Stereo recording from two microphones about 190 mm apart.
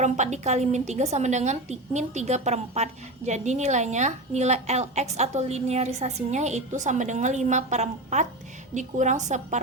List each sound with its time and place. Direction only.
0.0 s a woman's voice: 35° right (ahead or behind)